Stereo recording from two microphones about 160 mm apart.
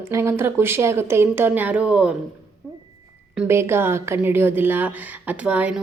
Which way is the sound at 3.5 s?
15° right (ahead or behind).